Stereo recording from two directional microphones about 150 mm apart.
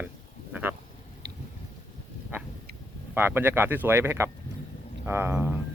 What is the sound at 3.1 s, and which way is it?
Speech, 15° right (ahead or behind).